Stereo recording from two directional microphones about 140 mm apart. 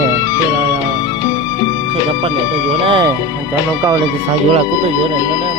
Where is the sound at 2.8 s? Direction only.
35° right (ahead or behind).